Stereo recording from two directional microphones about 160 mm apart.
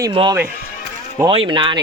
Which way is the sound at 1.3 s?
30° right (ahead or behind).